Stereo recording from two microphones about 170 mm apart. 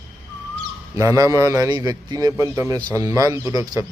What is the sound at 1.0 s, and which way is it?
Speech, 20° right (ahead or behind).